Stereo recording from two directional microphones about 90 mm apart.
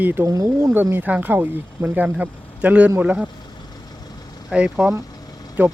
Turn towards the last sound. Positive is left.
turn(degrees=-20)  # may be behind; listen again after turning